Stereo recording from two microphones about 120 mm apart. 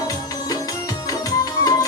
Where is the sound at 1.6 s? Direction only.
30° left (ahead or behind).